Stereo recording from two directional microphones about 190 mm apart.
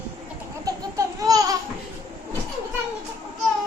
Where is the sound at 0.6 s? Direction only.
20° right (ahead or behind).